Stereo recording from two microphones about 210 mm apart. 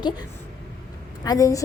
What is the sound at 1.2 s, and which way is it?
Speech, 15° left (ahead or behind).